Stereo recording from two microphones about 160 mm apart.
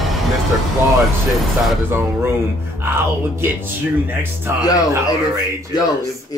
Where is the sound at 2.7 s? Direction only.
15° right (ahead or behind).